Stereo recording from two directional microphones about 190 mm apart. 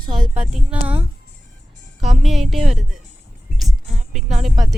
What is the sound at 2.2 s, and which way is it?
Speech, centre (ahead or behind).